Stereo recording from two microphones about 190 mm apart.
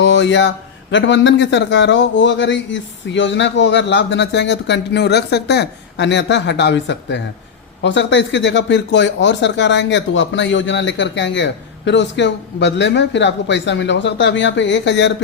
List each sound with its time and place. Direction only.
0.0 s speech: 70° left (ahead or behind)